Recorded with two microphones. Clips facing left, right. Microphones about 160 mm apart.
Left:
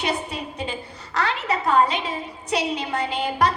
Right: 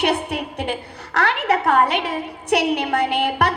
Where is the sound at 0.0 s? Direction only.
65° right (ahead or behind).